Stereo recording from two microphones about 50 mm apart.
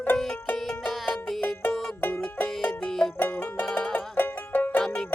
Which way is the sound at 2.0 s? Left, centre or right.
Left.